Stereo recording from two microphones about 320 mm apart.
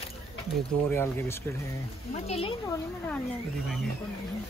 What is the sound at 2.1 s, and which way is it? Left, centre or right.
Speech, centre.